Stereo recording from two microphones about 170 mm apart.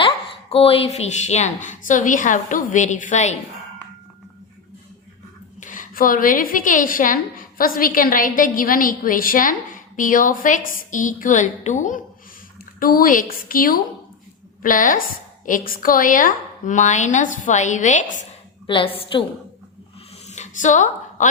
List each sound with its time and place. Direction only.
0.5 s a woman's voice: 35° left (ahead or behind)
5.5 s a woman's voice: 50° left (ahead or behind)
18.7 s a woman's voice: 30° left (ahead or behind)
20.2 s a sound: 45° left (ahead or behind)